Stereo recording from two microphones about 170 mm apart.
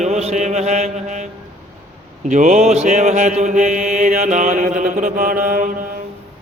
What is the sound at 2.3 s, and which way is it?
Mantra, 45° right (ahead or behind).